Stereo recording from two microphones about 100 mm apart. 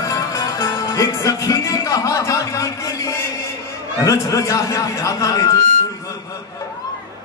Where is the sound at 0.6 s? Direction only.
30° left (ahead or behind).